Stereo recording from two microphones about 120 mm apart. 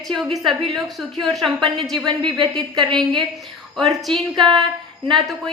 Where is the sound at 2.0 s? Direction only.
35° right (ahead or behind).